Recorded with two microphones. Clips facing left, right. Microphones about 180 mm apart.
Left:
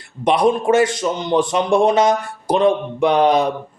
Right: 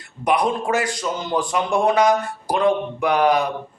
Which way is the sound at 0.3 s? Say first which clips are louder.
Left 5 dB; 25° left (ahead or behind).